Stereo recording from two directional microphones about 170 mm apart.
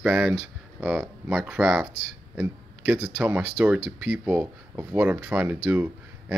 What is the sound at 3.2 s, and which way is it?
Speech, 10° right (ahead or behind).